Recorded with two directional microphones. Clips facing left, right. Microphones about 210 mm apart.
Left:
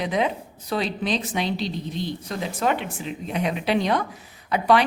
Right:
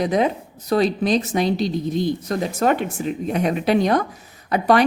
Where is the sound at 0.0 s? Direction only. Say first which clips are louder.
Right 5 dB; 40° right (ahead or behind).